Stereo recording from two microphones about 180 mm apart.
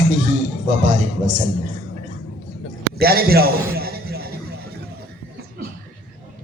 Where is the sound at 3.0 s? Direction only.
55° right (ahead or behind).